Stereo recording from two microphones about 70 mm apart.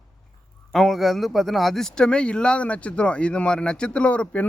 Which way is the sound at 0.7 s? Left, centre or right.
Centre.